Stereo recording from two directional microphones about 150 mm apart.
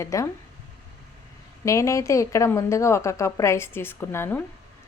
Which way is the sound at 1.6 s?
20° left (ahead or behind).